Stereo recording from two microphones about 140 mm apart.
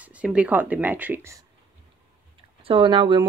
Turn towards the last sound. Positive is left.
turn(degrees=-35)  # may be behind; listen again after turning